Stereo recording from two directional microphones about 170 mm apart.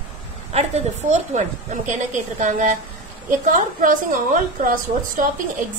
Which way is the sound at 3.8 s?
50° right (ahead or behind).